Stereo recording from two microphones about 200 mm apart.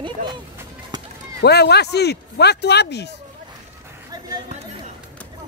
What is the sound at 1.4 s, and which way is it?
Speech, 55° left (ahead or behind).